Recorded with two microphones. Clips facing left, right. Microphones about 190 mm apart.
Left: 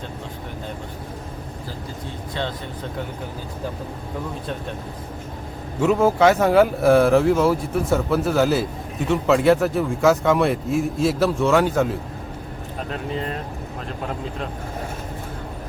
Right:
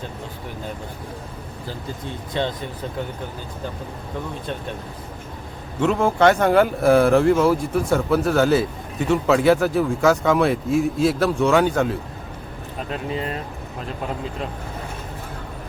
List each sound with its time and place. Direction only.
2.4 s speech: 20° right (ahead or behind)
5.8 s speech: 5° left (ahead or behind)